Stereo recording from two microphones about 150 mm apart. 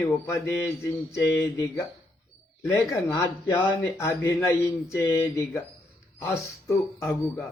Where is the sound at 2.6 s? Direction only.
15° left (ahead or behind).